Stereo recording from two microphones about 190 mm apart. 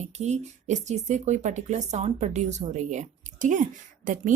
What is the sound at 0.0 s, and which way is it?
Speech, 35° right (ahead or behind).